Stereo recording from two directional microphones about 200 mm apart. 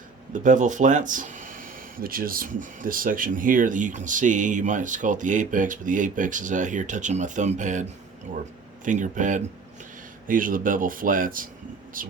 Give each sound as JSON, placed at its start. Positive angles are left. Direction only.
{"t": 0.3, "sound": "speech", "side_deg": -40}